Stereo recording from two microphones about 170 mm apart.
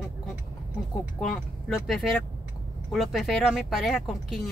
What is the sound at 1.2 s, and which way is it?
Speech, centre (ahead or behind).